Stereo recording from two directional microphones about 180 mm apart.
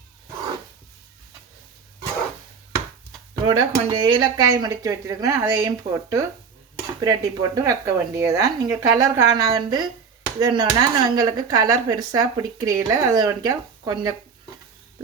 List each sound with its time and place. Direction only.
3.4 s speech: 25° right (ahead or behind)